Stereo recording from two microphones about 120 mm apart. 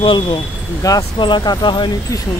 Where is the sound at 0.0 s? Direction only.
40° left (ahead or behind).